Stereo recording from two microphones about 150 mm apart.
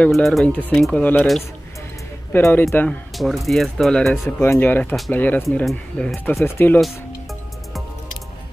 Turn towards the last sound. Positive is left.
turn(degrees=15)  # may be behind; listen again after turning